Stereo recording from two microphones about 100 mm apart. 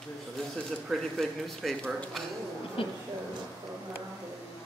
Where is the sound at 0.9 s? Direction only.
Centre (ahead or behind).